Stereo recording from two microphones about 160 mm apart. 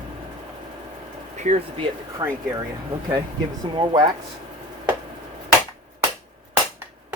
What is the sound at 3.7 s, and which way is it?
Speech, 25° right (ahead or behind).